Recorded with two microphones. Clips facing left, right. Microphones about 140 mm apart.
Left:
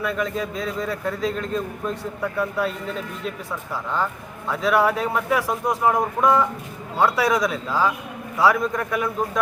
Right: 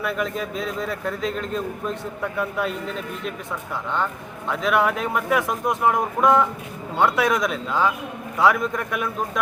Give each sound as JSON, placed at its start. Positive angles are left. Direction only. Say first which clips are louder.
{"t": 0.0, "sound": "a man's voice", "louder": "left 1 dB", "side_deg": -5}
{"t": 3.9, "sound": "a man's voice", "louder": "left 1 dB", "side_deg": 5}